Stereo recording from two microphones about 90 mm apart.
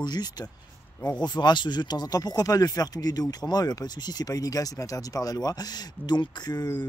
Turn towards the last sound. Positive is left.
turn(degrees=50)  # may be behind; listen again after turning